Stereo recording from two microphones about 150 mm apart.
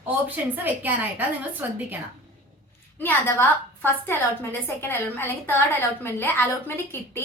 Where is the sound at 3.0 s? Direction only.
15° left (ahead or behind).